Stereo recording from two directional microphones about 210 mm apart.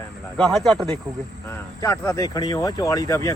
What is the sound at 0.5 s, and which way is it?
Speech, centre (ahead or behind).